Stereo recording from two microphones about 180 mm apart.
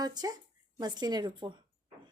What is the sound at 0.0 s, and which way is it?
A woman's voice, 20° right (ahead or behind).